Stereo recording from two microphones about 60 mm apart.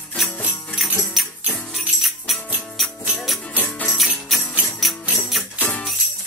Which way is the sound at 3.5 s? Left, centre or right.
Left.